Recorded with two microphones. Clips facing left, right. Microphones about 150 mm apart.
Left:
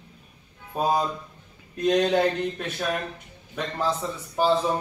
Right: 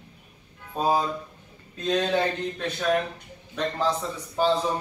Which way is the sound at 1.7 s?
15° left (ahead or behind).